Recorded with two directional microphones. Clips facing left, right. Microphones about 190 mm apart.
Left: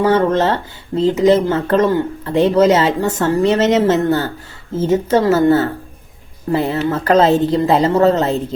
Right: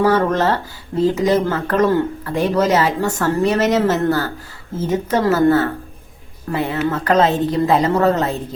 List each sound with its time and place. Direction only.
0.0 s speech: 25° left (ahead or behind)